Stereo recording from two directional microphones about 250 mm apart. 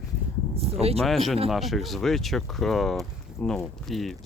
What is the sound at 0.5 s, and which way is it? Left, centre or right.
Speech, right.